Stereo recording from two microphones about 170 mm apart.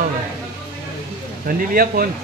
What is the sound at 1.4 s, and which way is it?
Speech, 60° right (ahead or behind).